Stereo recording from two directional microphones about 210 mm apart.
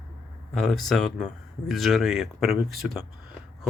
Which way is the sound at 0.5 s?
Centre (ahead or behind).